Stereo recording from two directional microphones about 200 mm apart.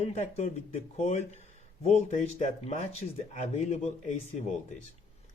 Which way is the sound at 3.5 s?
35° left (ahead or behind).